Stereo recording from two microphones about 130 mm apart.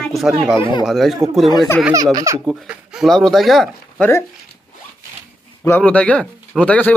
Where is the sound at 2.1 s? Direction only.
25° right (ahead or behind).